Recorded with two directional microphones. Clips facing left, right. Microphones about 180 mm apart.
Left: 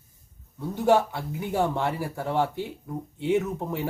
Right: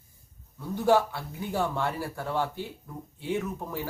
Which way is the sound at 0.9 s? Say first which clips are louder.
Left 2 dB; 20° left (ahead or behind).